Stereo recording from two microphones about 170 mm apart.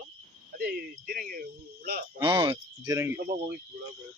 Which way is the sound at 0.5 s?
60° right (ahead or behind).